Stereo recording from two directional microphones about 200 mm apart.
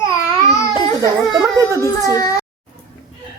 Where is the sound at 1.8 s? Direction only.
15° left (ahead or behind).